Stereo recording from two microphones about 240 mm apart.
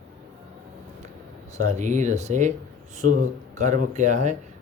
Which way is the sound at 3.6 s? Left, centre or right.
Right.